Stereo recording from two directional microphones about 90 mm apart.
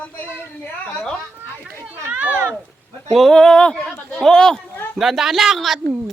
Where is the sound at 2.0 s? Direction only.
20° right (ahead or behind).